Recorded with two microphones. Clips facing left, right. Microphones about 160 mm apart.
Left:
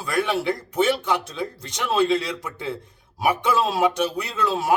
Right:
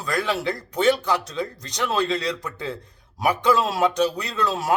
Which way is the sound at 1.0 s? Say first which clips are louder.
Even; 20° left (ahead or behind).